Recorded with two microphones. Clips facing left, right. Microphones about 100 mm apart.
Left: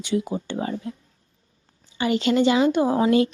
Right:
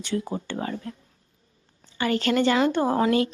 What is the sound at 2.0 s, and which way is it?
Speech, 20° left (ahead or behind).